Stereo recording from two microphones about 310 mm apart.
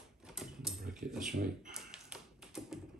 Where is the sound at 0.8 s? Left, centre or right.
Right.